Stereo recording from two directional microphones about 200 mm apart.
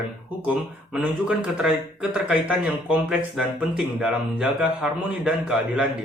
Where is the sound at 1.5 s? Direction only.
5° right (ahead or behind).